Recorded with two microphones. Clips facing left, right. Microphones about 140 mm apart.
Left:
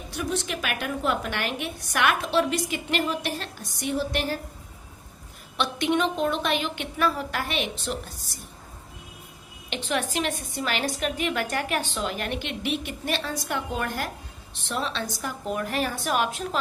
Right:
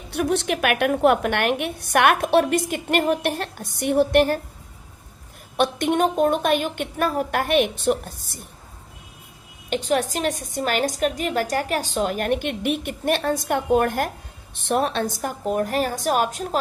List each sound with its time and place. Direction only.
0.1 s a woman's voice: 65° right (ahead or behind)
5.5 s a woman's voice: 50° right (ahead or behind)
9.6 s a woman's voice: 45° right (ahead or behind)